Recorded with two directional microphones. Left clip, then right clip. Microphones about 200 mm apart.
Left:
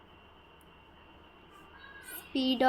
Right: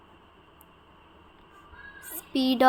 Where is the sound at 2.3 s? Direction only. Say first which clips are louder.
Right 6 dB; 30° right (ahead or behind).